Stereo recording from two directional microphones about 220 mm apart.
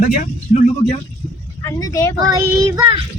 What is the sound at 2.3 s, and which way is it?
Speech, 15° right (ahead or behind).